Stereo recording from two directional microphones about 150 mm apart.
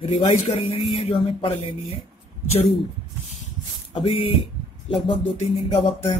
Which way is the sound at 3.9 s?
45° left (ahead or behind).